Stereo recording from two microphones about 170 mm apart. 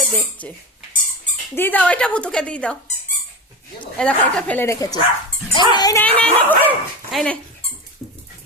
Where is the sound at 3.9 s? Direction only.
5° left (ahead or behind); by 6.0 s 25° left (ahead or behind).